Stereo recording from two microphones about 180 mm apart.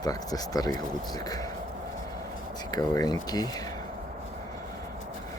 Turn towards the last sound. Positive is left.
turn(degrees=20)  # may be behind; listen again after turning